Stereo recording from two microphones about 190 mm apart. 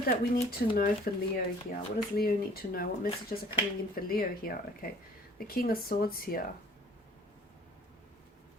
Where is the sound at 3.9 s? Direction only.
50° left (ahead or behind).